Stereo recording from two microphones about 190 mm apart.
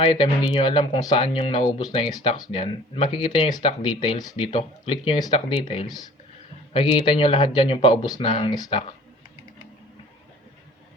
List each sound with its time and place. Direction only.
0.0 s speech: 25° left (ahead or behind)
8.5 s speech: 20° left (ahead or behind)